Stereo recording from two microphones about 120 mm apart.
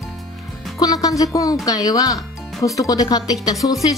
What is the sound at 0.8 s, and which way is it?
Music, 30° left (ahead or behind).